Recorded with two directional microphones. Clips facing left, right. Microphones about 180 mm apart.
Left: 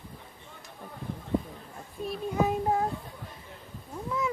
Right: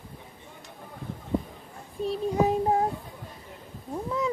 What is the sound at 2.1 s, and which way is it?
Speech, 30° right (ahead or behind).